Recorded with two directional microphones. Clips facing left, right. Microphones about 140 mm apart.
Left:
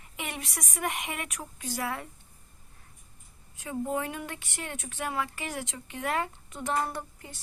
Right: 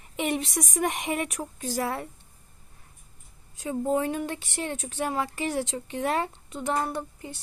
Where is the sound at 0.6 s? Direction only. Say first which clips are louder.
Right 6 dB; 35° right (ahead or behind).